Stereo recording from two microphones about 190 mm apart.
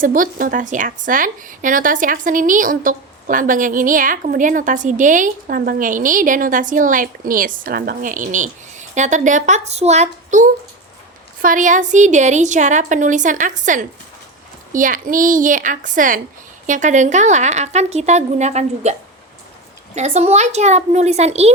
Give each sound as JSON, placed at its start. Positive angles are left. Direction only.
{"t": 0.0, "sound": "a woman's voice", "side_deg": -45}
{"t": 20.0, "sound": "a woman's voice", "side_deg": -35}